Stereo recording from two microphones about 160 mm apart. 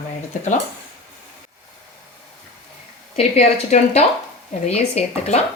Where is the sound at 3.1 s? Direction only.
40° left (ahead or behind).